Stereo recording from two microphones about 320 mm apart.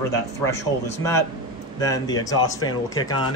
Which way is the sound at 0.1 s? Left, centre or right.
Centre.